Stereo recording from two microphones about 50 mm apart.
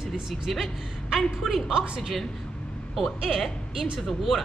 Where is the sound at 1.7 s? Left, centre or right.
Centre.